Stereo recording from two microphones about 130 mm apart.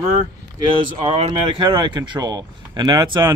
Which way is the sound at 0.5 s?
40° right (ahead or behind).